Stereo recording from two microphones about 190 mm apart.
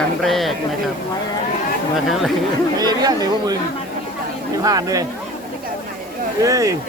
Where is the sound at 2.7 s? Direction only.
20° right (ahead or behind).